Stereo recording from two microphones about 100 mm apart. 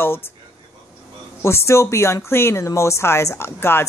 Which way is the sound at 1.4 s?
30° left (ahead or behind).